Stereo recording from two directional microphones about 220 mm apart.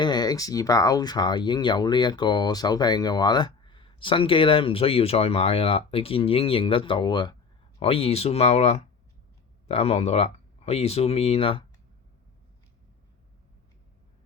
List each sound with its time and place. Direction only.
0.0 s speech: 20° left (ahead or behind)